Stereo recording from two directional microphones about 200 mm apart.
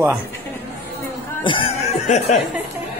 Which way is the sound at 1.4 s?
30° left (ahead or behind).